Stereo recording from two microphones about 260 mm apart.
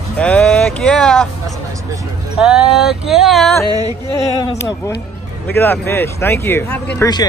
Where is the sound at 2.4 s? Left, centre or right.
Centre.